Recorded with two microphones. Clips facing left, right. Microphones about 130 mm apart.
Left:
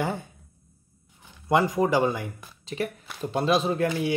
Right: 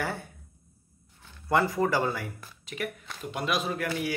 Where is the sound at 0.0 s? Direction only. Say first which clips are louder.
Left 4 dB; 20° left (ahead or behind).